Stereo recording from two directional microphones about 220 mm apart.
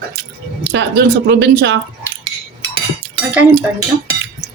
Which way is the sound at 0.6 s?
50° right (ahead or behind).